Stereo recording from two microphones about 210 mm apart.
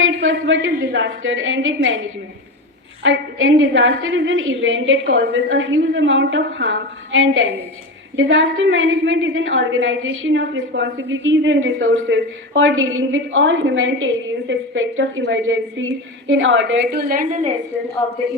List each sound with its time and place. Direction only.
0.0 s a woman's voice: 65° right (ahead or behind); by 17.5 s 35° right (ahead or behind)